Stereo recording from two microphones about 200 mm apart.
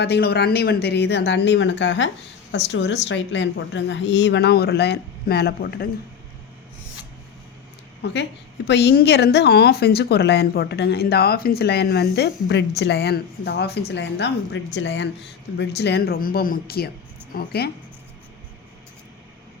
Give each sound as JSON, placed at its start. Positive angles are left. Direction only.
{"t": 0.0, "sound": "a woman's voice", "side_deg": 55}
{"t": 8.0, "sound": "a woman's voice", "side_deg": 60}